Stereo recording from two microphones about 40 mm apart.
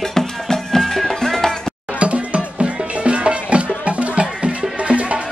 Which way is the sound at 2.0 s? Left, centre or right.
Right.